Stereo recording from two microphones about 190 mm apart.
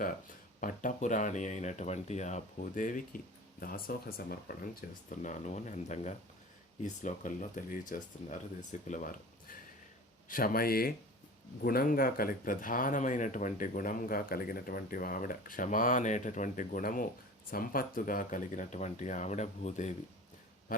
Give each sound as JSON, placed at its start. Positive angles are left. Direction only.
{"t": 0.6, "sound": "speech", "side_deg": 45}
{"t": 20.7, "sound": "pig", "side_deg": 45}